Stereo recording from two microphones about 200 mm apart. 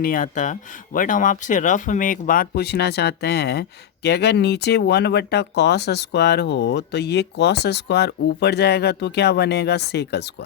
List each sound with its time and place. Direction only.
0.0 s speech: 45° left (ahead or behind)